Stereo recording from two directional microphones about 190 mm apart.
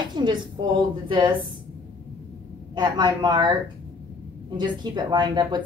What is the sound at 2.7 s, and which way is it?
Speech, 25° right (ahead or behind).